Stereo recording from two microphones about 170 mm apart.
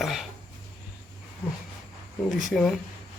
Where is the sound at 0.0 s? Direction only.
Centre (ahead or behind).